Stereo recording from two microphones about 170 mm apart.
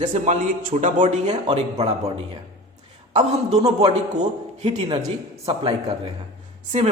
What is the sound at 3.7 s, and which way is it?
A man's voice, 35° right (ahead or behind).